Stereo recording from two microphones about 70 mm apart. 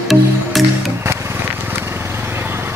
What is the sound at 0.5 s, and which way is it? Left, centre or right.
Music, centre.